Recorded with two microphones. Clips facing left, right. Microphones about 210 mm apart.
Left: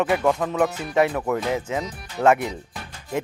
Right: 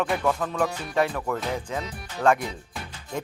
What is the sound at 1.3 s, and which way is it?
Speech, 10° left (ahead or behind).